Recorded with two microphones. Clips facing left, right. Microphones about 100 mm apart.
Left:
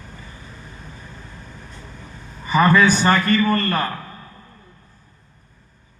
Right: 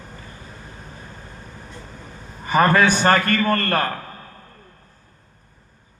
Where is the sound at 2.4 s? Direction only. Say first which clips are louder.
Left 1 dB; 50° right (ahead or behind).